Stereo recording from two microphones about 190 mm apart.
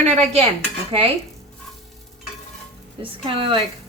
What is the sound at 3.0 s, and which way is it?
Speech, 30° right (ahead or behind).